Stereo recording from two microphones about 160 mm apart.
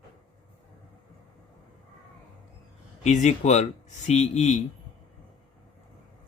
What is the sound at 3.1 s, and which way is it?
Speech, 45° left (ahead or behind).